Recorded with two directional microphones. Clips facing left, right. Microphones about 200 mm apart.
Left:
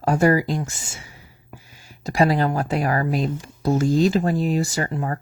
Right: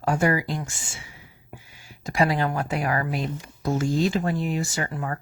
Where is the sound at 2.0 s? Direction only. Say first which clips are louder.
Left 4 dB; 35° left (ahead or behind).